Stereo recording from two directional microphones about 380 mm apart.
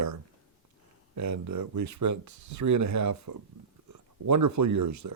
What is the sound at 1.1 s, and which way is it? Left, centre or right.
Speech, right.